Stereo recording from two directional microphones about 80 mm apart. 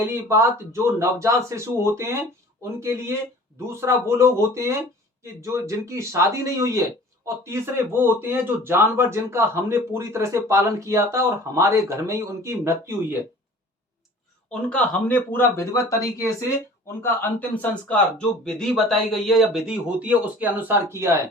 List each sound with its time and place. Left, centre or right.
0.0 s a man's voice: right
14.7 s speech: centre; by 16.3 s left
17.0 s speech: left
18.4 s a man's voice: centre; by 20.9 s right